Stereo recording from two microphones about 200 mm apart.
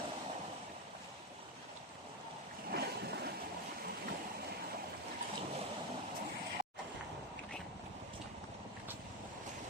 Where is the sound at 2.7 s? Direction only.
55° right (ahead or behind).